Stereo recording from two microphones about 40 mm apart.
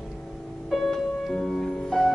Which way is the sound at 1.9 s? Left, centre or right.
Centre.